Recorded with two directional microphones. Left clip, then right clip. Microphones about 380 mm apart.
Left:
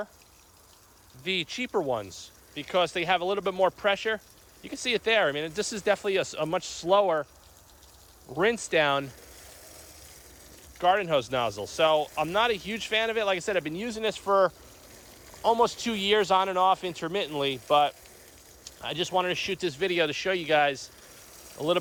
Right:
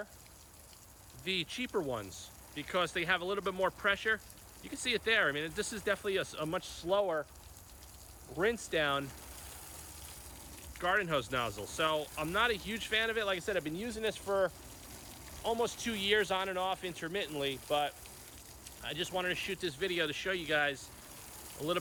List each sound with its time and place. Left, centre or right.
1.2 s speech: centre
8.4 s speech: centre
10.8 s speech: centre
15.4 s speech: centre